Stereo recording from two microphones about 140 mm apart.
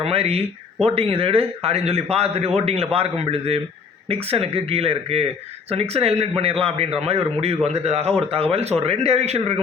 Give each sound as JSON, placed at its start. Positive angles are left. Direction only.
{"t": 0.0, "sound": "speech", "side_deg": -45}